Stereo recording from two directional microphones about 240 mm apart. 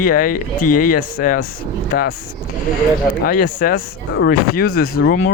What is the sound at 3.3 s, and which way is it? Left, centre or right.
Speech, left.